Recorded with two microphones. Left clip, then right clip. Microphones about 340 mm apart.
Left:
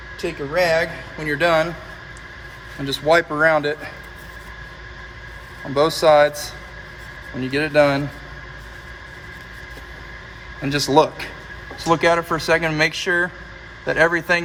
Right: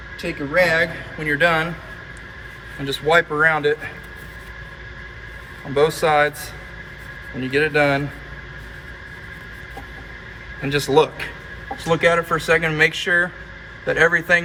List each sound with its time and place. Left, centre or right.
0.2 s speech: centre
2.8 s speech: left
5.7 s speech: left
10.6 s speech: left